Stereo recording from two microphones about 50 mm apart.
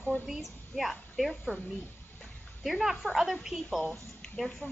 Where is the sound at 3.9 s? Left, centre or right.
Centre.